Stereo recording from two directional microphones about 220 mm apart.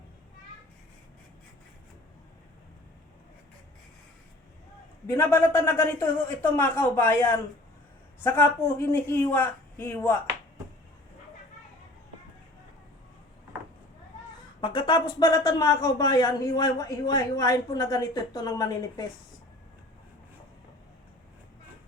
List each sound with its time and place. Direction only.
5.0 s speech: 10° left (ahead or behind)
14.6 s speech: 20° left (ahead or behind)